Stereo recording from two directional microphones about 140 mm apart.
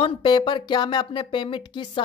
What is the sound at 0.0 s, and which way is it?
A woman's voice, 30° left (ahead or behind).